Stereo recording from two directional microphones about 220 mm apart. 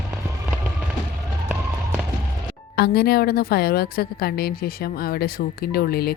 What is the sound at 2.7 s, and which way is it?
A woman's voice, 45° left (ahead or behind).